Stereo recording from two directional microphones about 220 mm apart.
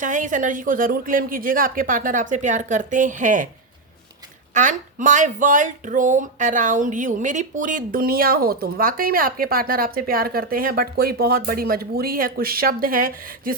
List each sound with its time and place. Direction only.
0.0 s speech: 35° right (ahead or behind)
4.5 s speech: 35° right (ahead or behind)